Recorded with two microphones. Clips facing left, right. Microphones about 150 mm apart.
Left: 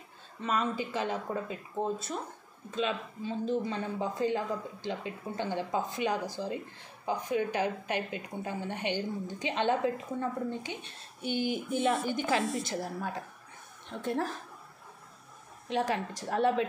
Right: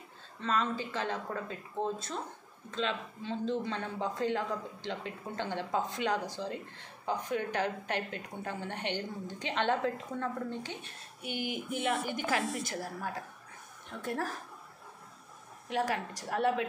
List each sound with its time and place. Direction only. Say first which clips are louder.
0.4 s speech: left 1 dB; 15° left (ahead or behind)
11.2 s a woman's voice: left 5 dB; 30° left (ahead or behind)
15.7 s a woman's voice: left 2 dB; 25° left (ahead or behind)